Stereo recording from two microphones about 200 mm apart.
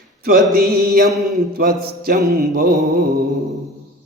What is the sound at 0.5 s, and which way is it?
Mantra, 50° right (ahead or behind).